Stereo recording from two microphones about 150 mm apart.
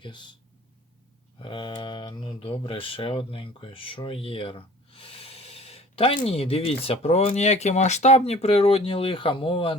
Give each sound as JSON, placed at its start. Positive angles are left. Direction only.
{"t": 0.0, "sound": "speech", "side_deg": 30}
{"t": 1.4, "sound": "speech", "side_deg": 30}